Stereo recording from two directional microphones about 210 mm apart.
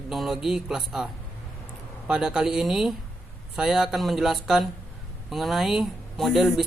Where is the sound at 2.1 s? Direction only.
5° right (ahead or behind).